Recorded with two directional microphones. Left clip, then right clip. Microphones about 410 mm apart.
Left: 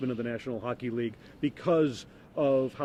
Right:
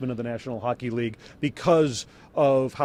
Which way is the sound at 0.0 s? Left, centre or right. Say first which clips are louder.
Right 2 dB; right.